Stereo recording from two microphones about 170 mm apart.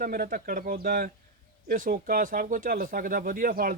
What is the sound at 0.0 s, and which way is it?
Speech, 55° right (ahead or behind).